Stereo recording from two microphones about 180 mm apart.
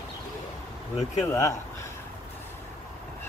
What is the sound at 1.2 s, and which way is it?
Speech, 15° left (ahead or behind).